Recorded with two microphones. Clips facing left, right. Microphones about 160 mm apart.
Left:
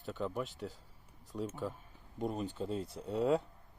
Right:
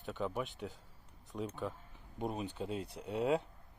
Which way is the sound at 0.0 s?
15° right (ahead or behind).